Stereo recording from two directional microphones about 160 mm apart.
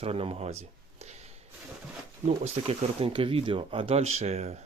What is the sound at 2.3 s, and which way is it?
Speech, 40° right (ahead or behind).